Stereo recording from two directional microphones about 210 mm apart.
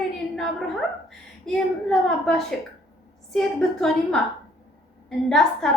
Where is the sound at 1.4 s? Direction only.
Centre (ahead or behind).